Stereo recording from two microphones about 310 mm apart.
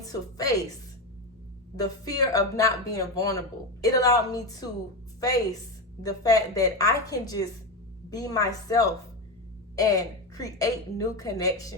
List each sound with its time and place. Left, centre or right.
0.0 s a woman's voice: centre
1.8 s speech: centre